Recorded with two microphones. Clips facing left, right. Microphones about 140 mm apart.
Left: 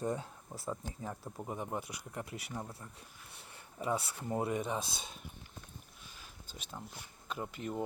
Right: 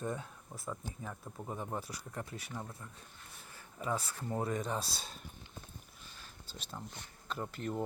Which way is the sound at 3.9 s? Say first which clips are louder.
Left 1 dB; 15° left (ahead or behind).